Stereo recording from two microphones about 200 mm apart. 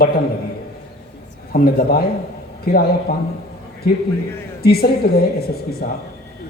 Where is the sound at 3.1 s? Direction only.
50° left (ahead or behind).